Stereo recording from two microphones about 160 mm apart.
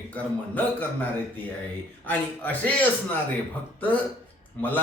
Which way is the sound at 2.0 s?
10° left (ahead or behind).